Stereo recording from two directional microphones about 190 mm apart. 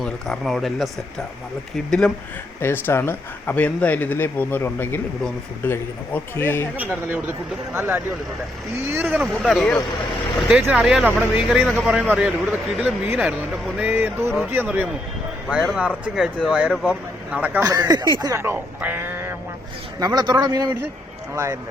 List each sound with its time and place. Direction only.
0.0 s speech: centre (ahead or behind)
6.7 s speech: 10° right (ahead or behind)
17.6 s a man's voice: 20° right (ahead or behind)